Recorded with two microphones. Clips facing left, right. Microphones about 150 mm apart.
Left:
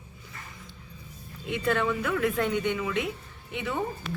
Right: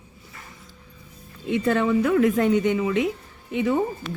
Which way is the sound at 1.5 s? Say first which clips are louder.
Right 6 dB; 40° right (ahead or behind).